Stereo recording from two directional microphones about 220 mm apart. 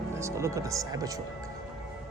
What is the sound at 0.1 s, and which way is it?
A man's voice, 10° right (ahead or behind).